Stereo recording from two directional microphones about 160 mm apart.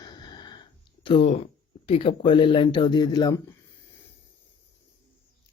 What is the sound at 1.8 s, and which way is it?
Speech, 35° left (ahead or behind).